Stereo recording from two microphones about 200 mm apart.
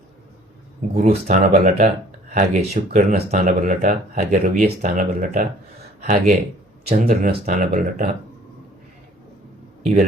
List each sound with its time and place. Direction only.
0.9 s speech: 35° right (ahead or behind)
9.8 s speech: 35° right (ahead or behind)